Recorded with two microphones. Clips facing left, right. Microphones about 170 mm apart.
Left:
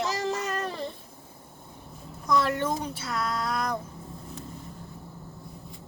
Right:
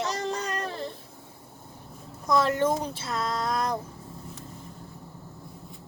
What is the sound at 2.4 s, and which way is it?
Speech, 25° right (ahead or behind).